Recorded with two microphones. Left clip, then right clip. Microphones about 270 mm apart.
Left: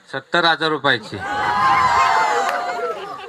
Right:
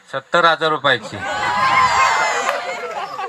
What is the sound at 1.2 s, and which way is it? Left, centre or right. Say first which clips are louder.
Chatter: left 1 dB; centre.